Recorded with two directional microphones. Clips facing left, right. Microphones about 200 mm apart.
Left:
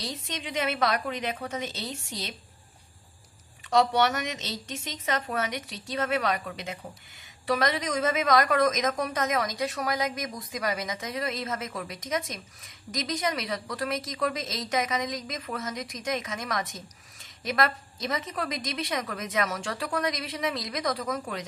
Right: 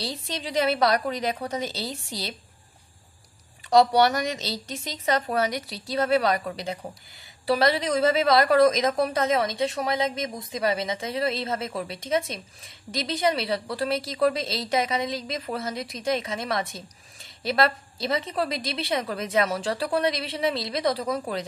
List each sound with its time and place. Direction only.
0.0 s a woman's voice: 35° right (ahead or behind)
3.7 s a woman's voice: 35° right (ahead or behind)